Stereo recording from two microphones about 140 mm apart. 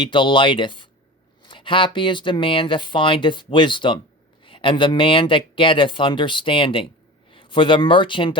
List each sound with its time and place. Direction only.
0.0 s speech: 35° left (ahead or behind)